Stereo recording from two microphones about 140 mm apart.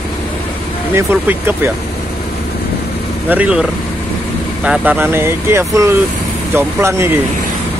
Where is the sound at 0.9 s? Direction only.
15° right (ahead or behind).